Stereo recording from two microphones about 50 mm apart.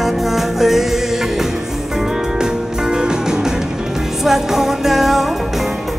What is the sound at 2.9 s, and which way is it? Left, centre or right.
Music, centre.